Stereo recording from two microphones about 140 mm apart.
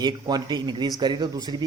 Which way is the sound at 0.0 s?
30° right (ahead or behind).